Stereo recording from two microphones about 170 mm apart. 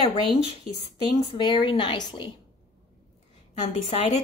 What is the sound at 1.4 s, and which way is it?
Speech, 25° left (ahead or behind).